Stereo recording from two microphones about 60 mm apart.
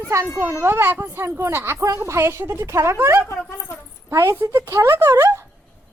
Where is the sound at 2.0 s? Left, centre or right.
Right.